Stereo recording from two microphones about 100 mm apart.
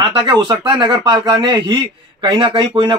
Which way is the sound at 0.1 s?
50° right (ahead or behind).